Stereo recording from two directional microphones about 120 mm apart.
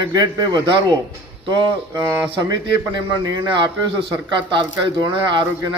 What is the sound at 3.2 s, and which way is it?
A man's voice, 40° right (ahead or behind).